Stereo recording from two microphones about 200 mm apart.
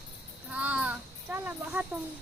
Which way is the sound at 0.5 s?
5° right (ahead or behind).